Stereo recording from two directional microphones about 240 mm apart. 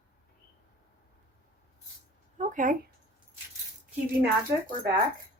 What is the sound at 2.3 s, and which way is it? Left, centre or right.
Speech, right.